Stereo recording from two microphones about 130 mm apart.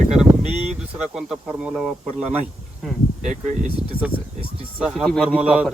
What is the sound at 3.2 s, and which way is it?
Speech, 70° right (ahead or behind).